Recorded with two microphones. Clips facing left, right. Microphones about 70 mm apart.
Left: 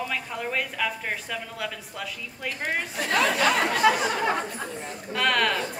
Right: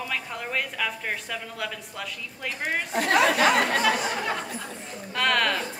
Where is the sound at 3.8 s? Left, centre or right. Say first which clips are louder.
Left 3 dB; left.